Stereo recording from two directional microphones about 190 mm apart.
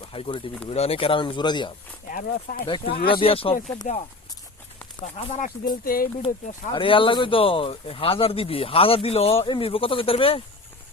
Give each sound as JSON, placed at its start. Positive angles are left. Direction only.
{"t": 0.1, "sound": "speech", "side_deg": 30}
{"t": 2.0, "sound": "speech", "side_deg": 45}
{"t": 2.6, "sound": "speech", "side_deg": 25}
{"t": 3.9, "sound": "speech", "side_deg": 40}
{"t": 5.6, "sound": "speech", "side_deg": 50}
{"t": 6.7, "sound": "speech", "side_deg": 25}